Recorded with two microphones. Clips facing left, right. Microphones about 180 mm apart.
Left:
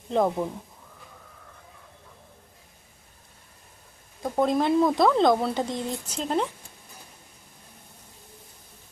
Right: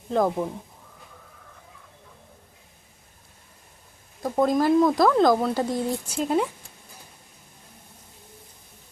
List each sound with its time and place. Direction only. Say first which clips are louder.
0.1 s speech: right 1 dB; centre (ahead or behind)
4.2 s speech: right 2 dB; centre (ahead or behind)